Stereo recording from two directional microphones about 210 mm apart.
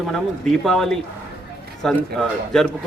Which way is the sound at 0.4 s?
Centre (ahead or behind).